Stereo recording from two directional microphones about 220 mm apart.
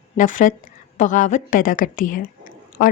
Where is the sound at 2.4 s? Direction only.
40° left (ahead or behind).